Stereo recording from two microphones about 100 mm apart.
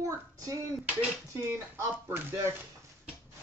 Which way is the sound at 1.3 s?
25° right (ahead or behind).